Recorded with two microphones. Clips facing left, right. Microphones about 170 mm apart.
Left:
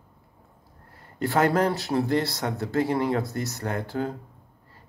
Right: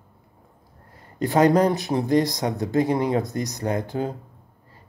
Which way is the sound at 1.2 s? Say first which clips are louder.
Right 4 dB; 15° right (ahead or behind).